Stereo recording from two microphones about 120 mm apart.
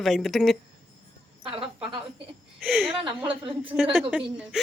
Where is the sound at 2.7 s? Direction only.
15° right (ahead or behind).